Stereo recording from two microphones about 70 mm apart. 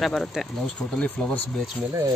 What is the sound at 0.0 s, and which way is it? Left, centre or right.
Speech, centre.